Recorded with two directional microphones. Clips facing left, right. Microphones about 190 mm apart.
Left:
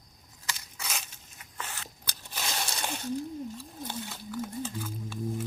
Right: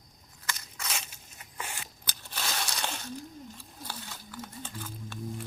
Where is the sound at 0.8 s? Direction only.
Centre (ahead or behind).